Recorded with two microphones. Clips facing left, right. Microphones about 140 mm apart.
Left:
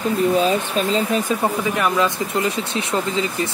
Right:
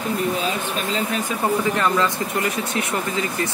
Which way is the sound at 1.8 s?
20° left (ahead or behind).